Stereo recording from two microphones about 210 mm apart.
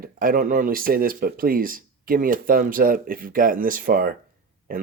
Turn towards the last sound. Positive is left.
turn(degrees=-40)  # may be behind; listen again after turning